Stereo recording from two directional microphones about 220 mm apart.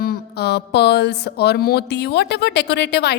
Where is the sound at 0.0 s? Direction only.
45° left (ahead or behind).